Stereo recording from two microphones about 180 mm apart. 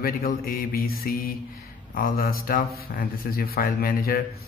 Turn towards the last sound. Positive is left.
turn(degrees=55)  # may be behind; listen again after turning